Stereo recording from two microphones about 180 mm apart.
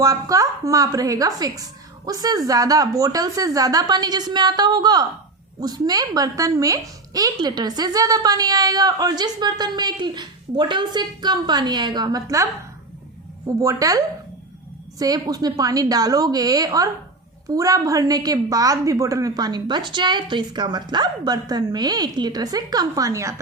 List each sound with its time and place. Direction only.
0.0 s speech: 20° right (ahead or behind)
13.6 s speech: 20° right (ahead or behind)